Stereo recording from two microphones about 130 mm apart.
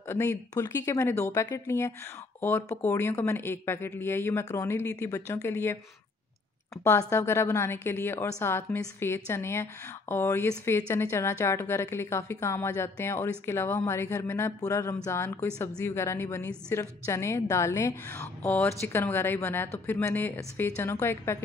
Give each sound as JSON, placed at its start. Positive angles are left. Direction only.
{"t": 0.1, "sound": "a woman's voice", "side_deg": 20}
{"t": 6.8, "sound": "a woman's voice", "side_deg": 20}